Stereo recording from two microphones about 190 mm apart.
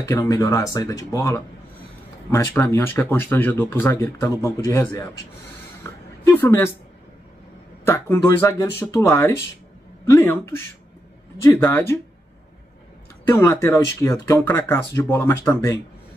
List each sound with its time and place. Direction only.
0.0 s speech: 15° left (ahead or behind)
5.9 s a sound: 15° left (ahead or behind)
7.8 s speech: 15° left (ahead or behind)
11.4 s speech: 15° left (ahead or behind)
13.3 s speech: 15° left (ahead or behind)